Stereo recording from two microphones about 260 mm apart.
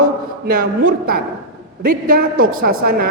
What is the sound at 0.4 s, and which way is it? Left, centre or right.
A woman's voice, right.